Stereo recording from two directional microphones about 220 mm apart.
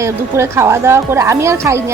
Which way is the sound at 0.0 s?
10° right (ahead or behind).